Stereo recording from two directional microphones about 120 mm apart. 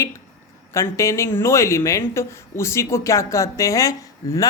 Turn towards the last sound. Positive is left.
turn(degrees=30)  # may be behind; listen again after turning